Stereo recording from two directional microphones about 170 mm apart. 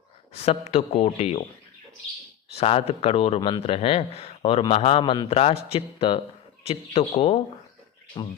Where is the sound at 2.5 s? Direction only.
35° left (ahead or behind).